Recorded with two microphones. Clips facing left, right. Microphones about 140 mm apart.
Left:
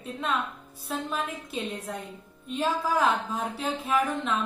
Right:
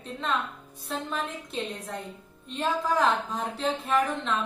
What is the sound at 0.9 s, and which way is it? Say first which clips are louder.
A woman's voice: left 1 dB; 5° left (ahead or behind).